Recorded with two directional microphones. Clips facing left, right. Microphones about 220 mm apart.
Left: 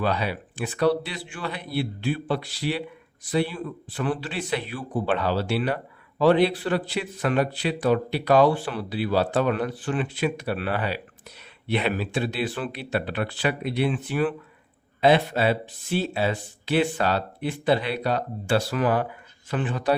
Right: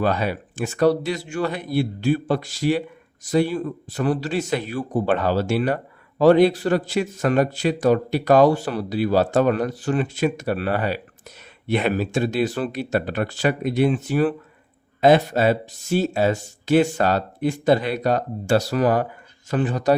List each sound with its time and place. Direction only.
0.0 s speech: 45° right (ahead or behind)